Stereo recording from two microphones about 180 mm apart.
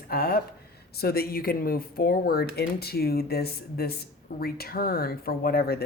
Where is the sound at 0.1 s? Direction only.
55° left (ahead or behind).